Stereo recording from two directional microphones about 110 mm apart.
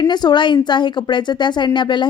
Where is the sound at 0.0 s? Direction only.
40° left (ahead or behind).